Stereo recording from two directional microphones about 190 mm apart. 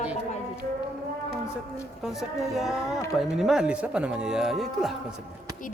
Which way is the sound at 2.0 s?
Centre (ahead or behind).